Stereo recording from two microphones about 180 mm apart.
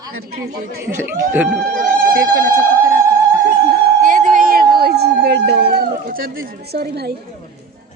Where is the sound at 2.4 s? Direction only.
55° right (ahead or behind).